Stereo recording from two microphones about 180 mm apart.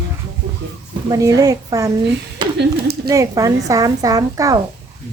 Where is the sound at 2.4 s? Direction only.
25° right (ahead or behind).